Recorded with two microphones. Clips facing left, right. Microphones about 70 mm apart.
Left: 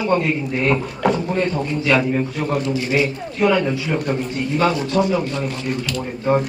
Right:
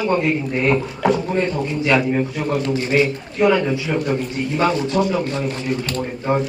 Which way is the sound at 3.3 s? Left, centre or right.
Centre.